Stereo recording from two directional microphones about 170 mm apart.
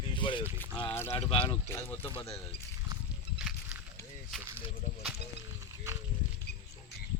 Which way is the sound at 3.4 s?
5° right (ahead or behind).